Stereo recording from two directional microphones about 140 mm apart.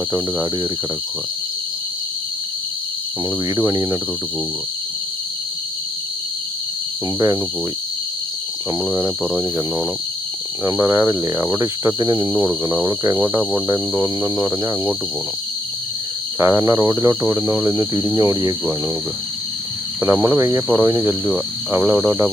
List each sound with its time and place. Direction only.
3.5 s cricket: 25° right (ahead or behind)
8.8 s speech: 15° right (ahead or behind)
10.6 s cricket: 20° right (ahead or behind)
16.4 s cricket: 20° right (ahead or behind)
20.0 s cricket: 20° right (ahead or behind)
20.7 s speech: 15° right (ahead or behind)
21.7 s cricket: 20° right (ahead or behind)
21.9 s speech: 10° right (ahead or behind)